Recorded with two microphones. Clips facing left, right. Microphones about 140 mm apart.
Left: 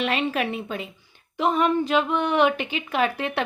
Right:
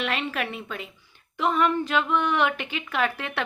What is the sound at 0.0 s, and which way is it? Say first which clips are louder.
Speech: left 4 dB; 20° left (ahead or behind).